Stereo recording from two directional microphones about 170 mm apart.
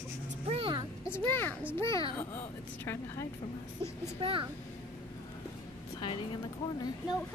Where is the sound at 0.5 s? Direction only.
30° right (ahead or behind).